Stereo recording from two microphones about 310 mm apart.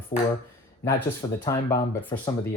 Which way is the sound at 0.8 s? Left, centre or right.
Centre.